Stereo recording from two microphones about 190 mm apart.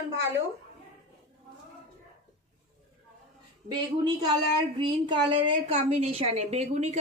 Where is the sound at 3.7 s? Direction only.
25° right (ahead or behind).